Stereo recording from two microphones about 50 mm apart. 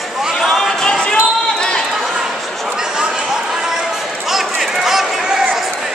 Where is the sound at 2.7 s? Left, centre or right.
Centre.